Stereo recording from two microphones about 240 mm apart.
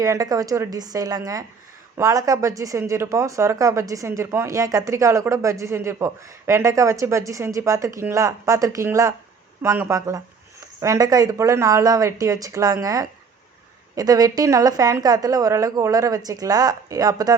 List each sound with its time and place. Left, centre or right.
0.0 s speech: centre